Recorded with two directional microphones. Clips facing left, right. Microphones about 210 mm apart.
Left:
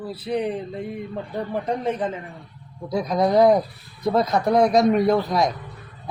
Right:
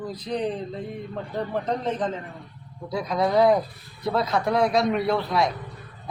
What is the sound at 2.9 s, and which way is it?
A man's voice, 40° left (ahead or behind).